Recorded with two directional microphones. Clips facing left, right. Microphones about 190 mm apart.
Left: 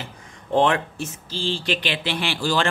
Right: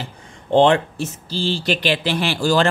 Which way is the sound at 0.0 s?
30° right (ahead or behind).